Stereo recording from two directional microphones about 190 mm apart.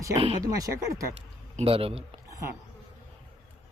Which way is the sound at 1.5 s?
30° right (ahead or behind).